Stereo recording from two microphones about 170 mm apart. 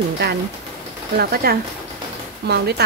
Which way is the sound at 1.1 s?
65° right (ahead or behind).